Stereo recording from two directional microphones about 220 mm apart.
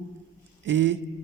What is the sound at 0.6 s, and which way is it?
Speech, 55° right (ahead or behind).